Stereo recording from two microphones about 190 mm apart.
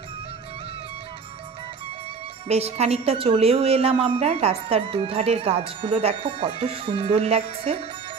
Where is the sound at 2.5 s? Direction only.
35° right (ahead or behind).